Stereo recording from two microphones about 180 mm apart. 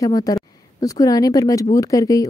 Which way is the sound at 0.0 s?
20° left (ahead or behind).